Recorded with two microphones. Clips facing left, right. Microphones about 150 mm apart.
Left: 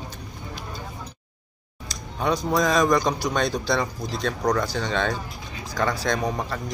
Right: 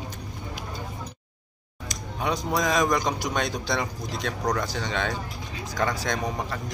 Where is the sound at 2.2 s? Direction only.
15° right (ahead or behind).